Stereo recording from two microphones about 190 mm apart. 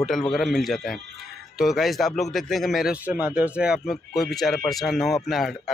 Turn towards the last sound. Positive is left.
turn(degrees=0)  # may be behind; listen again after turning